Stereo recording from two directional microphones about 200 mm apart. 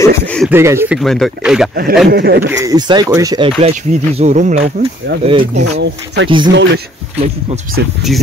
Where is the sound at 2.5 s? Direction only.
15° right (ahead or behind).